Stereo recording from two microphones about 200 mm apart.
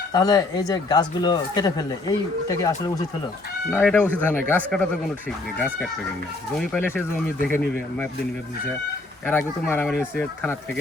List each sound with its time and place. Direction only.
0.1 s speech: 20° left (ahead or behind)
9.2 s speech: 10° left (ahead or behind)